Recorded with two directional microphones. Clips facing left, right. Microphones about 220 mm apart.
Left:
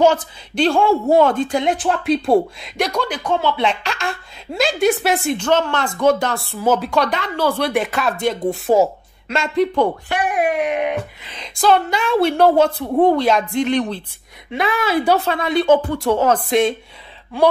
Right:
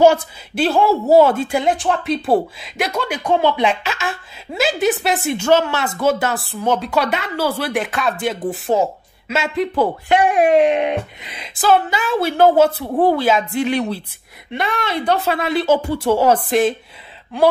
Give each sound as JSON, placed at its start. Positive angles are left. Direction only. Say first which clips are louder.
{"t": 0.0, "sound": "a woman's voice", "louder": "right 2 dB", "side_deg": -5}
{"t": 10.0, "sound": "speech", "louder": "right 5 dB", "side_deg": -25}
{"t": 11.2, "sound": "a woman's voice", "louder": "left 1 dB", "side_deg": -5}
{"t": 15.2, "sound": "a woman's voice", "louder": "left 1 dB", "side_deg": -5}